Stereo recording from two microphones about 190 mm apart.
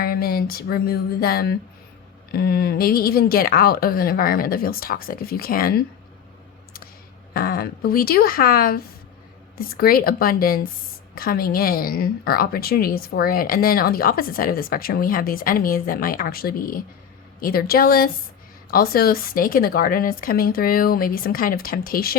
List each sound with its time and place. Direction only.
0.0 s a woman's voice: 50° left (ahead or behind)
7.3 s a woman's voice: 50° left (ahead or behind)